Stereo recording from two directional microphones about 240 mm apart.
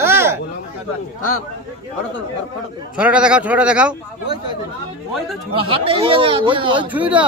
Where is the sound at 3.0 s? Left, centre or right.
Centre.